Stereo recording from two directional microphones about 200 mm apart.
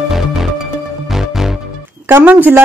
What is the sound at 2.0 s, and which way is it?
Speech, 10° right (ahead or behind).